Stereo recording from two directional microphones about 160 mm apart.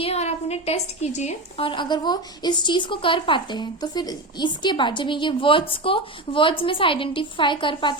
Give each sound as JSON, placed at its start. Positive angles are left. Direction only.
{"t": 0.0, "sound": "a woman's voice", "side_deg": 40}